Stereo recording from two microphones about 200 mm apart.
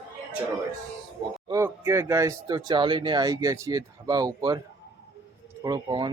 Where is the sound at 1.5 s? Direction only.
15° right (ahead or behind).